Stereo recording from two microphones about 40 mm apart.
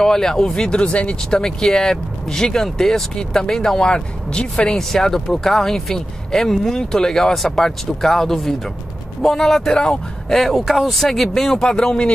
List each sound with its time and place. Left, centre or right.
0.0 s speech: centre
0.9 s speech: left
1.4 s speech: centre
4.7 s speech: centre
10.3 s speech: centre; by 12.1 s left